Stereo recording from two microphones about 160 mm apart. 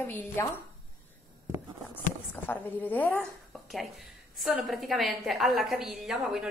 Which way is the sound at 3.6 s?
Centre (ahead or behind).